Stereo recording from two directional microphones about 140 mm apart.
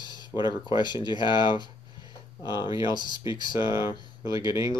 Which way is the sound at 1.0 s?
30° left (ahead or behind).